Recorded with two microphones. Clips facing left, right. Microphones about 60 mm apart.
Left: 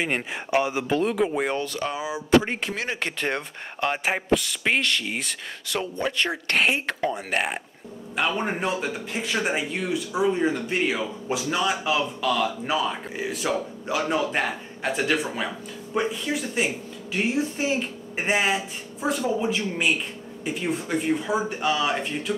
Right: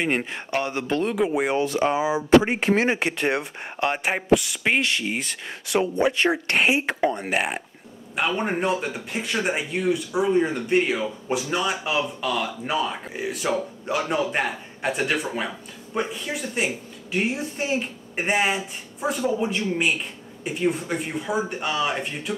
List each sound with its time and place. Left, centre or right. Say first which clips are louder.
0.0 s speech: right 2 dB; centre
1.6 s speech: right 7 dB; right
3.0 s speech: right 4 dB; centre
5.7 s a woman's voice: right 6 dB; centre